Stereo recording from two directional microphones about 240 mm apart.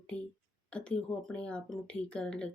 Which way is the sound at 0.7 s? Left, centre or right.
Centre.